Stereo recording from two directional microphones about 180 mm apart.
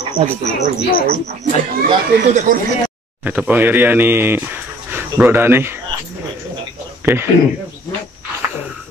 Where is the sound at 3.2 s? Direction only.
10° right (ahead or behind).